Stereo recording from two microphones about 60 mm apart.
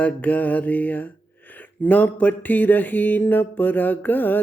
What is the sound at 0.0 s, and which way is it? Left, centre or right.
Mantra, left.